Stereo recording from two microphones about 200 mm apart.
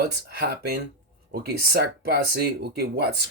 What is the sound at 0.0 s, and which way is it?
Speech, 55° right (ahead or behind).